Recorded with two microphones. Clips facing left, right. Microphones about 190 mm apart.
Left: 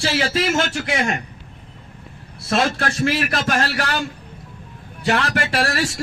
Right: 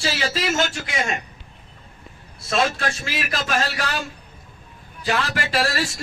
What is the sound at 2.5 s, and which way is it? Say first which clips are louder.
A man's voice: left 2 dB; 65° left (ahead or behind).